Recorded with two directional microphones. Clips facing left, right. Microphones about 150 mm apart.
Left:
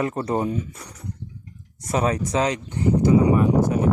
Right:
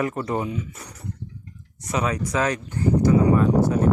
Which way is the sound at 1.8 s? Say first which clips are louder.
Left 2 dB; 35° left (ahead or behind).